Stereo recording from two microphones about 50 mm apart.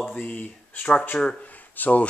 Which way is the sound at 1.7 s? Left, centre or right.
Left.